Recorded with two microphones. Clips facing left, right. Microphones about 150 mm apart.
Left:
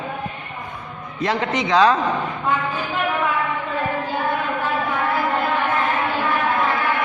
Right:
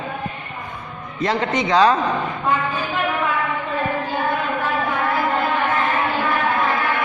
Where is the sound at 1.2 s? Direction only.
Centre (ahead or behind).